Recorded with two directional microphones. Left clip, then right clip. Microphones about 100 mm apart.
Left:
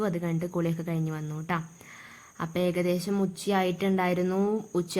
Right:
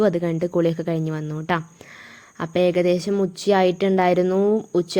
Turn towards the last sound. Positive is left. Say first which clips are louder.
# right 9 dB
turn(degrees=-30)  # may be behind; listen again after turning